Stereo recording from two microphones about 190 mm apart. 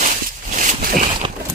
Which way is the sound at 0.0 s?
40° right (ahead or behind).